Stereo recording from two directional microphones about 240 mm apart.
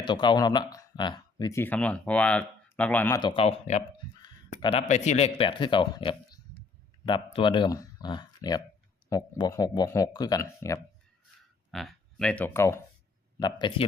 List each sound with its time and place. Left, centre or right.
0.0 s speech: centre
3.2 s speech: left
11.7 s speech: centre